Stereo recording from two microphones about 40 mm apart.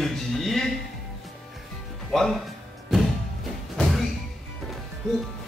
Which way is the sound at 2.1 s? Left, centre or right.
Centre.